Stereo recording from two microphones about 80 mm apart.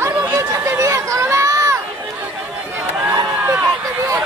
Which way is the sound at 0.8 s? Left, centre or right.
Right.